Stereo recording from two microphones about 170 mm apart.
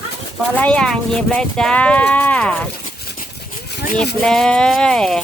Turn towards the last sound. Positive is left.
turn(degrees=5)  # may be behind; listen again after turning